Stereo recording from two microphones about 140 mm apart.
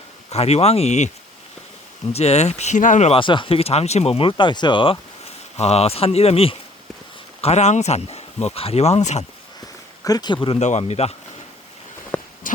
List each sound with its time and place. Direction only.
0.3 s speech: 50° left (ahead or behind)
2.1 s speech: 50° left (ahead or behind)
3.1 s speech: 35° left (ahead or behind); by 9.2 s 55° left (ahead or behind)
10.0 s speech: 30° left (ahead or behind)
10.6 s speech: 55° left (ahead or behind)
12.1 s walk: 15° left (ahead or behind)